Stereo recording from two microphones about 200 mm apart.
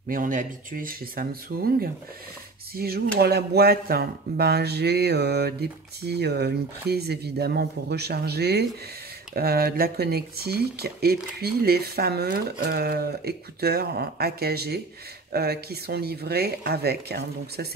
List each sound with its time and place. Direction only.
0.1 s speech: 40° right (ahead or behind)